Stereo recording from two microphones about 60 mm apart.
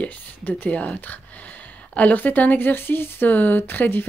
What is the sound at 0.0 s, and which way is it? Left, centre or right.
Speech, left.